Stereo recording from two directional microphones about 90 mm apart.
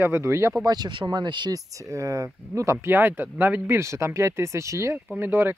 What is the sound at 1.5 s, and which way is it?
Speech, 40° right (ahead or behind).